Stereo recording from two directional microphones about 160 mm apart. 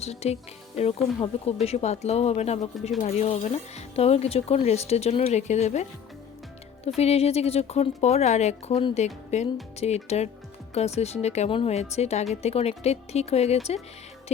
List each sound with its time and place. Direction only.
0.0 s speech: 40° left (ahead or behind)
6.8 s speech: 40° left (ahead or behind)